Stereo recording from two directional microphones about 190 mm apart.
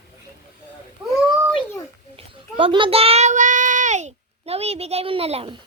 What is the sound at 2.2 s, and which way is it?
A child's voice, 25° right (ahead or behind).